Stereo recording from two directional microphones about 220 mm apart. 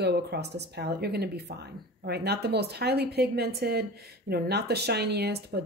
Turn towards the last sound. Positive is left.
turn(degrees=-45)  # may be behind; listen again after turning